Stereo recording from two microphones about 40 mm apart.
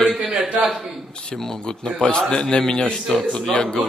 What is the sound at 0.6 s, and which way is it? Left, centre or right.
Speech, centre.